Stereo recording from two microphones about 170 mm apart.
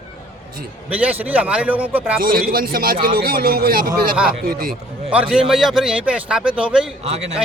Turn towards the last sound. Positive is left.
turn(degrees=-40)  # may be behind; listen again after turning